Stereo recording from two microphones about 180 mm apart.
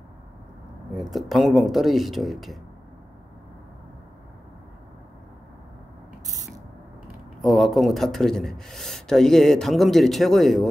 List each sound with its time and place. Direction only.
0.9 s speech: centre (ahead or behind)
6.2 s ratchet: 20° right (ahead or behind)
7.4 s speech: centre (ahead or behind)